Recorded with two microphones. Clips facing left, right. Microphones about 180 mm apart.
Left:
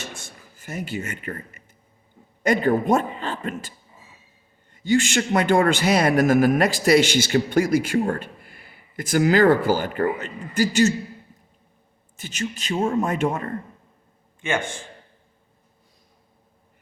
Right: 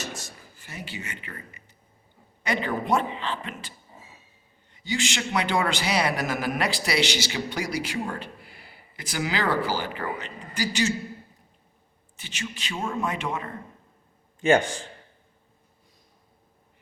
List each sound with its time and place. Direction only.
0.5 s a man's voice: 45° left (ahead or behind)
4.7 s a man's voice: 50° left (ahead or behind)
12.1 s a man's voice: 45° left (ahead or behind)
14.4 s a man's voice: 35° right (ahead or behind)